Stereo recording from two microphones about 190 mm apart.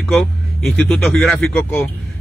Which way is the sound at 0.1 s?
Centre (ahead or behind).